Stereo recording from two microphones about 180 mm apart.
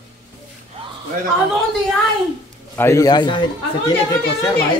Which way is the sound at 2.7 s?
15° left (ahead or behind).